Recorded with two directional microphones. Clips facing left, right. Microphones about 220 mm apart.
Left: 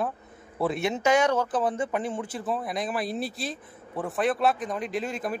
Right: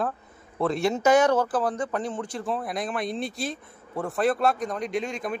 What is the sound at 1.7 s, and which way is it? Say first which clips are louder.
Speech: even; 25° left (ahead or behind).